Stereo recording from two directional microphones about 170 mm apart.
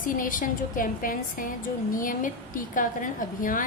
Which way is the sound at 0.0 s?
50° left (ahead or behind).